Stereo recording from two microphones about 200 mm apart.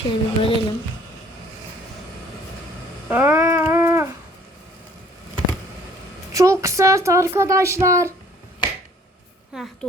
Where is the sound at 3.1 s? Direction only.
10° right (ahead or behind).